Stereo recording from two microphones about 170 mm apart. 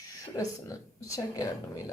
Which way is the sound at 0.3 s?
20° left (ahead or behind).